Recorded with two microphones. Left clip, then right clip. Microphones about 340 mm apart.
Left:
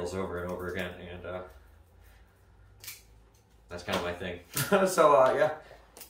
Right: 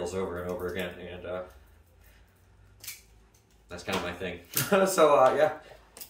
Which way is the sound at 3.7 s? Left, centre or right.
Centre.